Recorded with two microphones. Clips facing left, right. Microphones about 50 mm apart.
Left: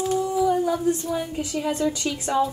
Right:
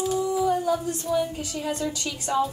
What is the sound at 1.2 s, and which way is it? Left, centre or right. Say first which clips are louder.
A woman's voice: even; left.